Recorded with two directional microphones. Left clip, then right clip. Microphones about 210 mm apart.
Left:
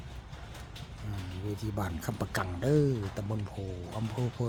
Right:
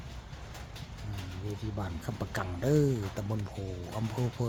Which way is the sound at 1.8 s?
15° left (ahead or behind).